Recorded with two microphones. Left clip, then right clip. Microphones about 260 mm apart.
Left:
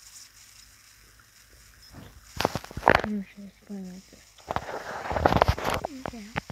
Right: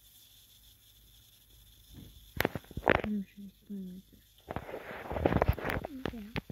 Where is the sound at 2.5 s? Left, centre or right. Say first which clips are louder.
Left 8 dB; left.